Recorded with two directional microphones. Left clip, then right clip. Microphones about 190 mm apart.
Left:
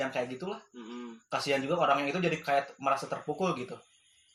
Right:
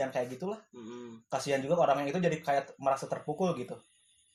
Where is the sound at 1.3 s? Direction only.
40° right (ahead or behind).